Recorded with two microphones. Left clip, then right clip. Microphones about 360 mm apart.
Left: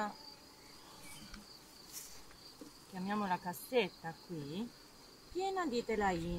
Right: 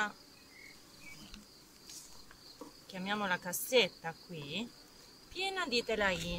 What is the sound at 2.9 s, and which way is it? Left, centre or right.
Speech, right.